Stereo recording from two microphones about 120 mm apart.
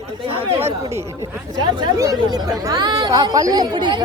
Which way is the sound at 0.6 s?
25° right (ahead or behind).